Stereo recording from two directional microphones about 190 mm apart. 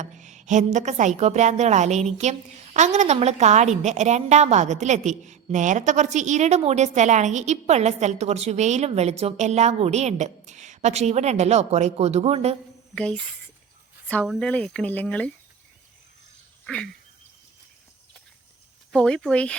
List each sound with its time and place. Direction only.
0.0 s a woman's voice: 40° right (ahead or behind)
12.9 s speech: 5° left (ahead or behind)
16.6 s a sound: 5° left (ahead or behind)
18.9 s speech: 5° left (ahead or behind)